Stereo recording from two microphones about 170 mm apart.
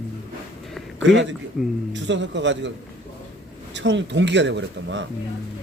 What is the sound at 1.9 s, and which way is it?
Speech, 90° right.